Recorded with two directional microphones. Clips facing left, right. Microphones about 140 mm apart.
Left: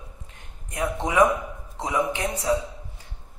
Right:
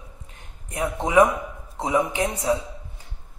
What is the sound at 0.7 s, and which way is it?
A woman's voice, 25° right (ahead or behind).